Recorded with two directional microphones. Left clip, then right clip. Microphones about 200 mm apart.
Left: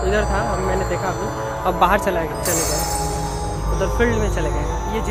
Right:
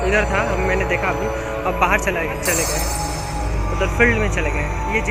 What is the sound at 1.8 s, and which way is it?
Speech, 20° left (ahead or behind).